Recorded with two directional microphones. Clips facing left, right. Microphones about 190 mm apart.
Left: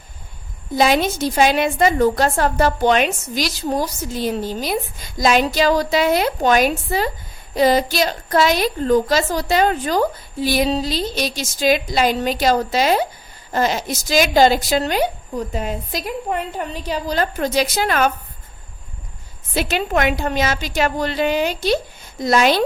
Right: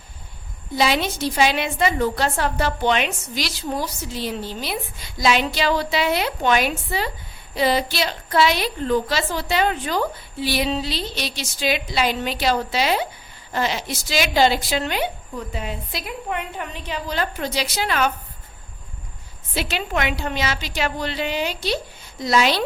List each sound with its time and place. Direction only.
0.8 s a woman's voice: 45° left (ahead or behind)
19.5 s a woman's voice: 50° left (ahead or behind)